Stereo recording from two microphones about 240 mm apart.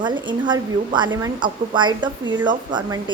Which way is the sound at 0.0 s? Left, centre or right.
Centre.